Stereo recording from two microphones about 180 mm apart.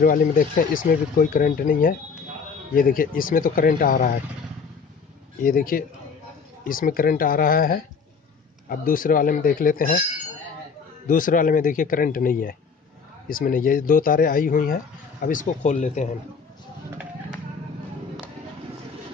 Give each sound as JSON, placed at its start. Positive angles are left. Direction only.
{"t": 0.0, "sound": "speech", "side_deg": 50}
{"t": 5.4, "sound": "speech", "side_deg": 55}
{"t": 11.1, "sound": "speech", "side_deg": 50}